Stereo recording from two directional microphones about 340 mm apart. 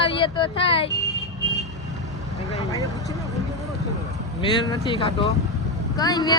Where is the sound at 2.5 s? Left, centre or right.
Centre.